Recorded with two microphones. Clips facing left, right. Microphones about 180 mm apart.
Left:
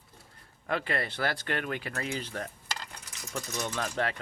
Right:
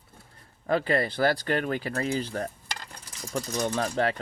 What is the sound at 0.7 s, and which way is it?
Speech, 35° right (ahead or behind).